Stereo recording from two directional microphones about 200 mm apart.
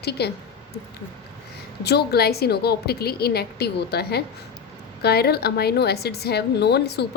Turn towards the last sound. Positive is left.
turn(degrees=55)  # may be behind; listen again after turning